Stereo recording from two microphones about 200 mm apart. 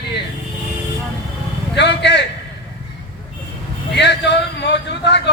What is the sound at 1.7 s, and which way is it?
Vehicle, 60° left (ahead or behind).